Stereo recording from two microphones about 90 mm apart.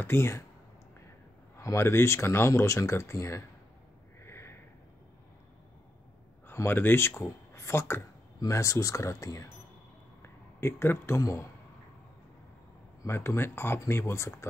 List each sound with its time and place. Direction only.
0.0 s speech: 25° left (ahead or behind)
1.6 s speech: 30° left (ahead or behind)
4.2 s sniff: 30° left (ahead or behind)
6.4 s speech: 25° left (ahead or behind)
10.2 s speech: 25° left (ahead or behind)
13.0 s speech: 30° left (ahead or behind)